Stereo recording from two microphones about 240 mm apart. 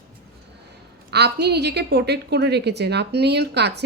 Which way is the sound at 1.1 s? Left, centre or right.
Right.